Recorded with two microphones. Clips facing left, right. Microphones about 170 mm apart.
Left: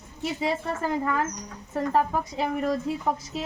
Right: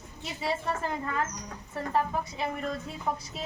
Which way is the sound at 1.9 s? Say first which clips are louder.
Left 3 dB; 90° left.